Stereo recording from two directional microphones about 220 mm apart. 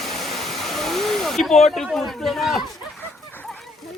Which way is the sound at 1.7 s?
Centre (ahead or behind).